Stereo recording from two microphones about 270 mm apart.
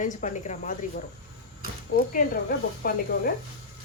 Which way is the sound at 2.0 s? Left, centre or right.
Left.